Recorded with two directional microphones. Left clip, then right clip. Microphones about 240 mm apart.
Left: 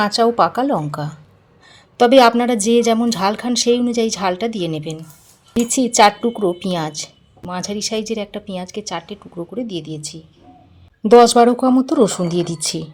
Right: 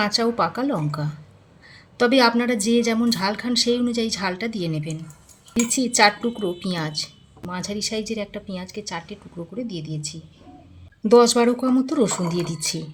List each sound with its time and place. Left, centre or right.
0.0 s a woman's voice: left